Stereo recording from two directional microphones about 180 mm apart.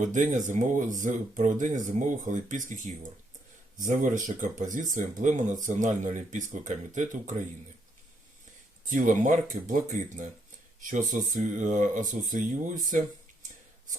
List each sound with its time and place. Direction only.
0.0 s speech: 45° right (ahead or behind)
8.9 s speech: 45° right (ahead or behind)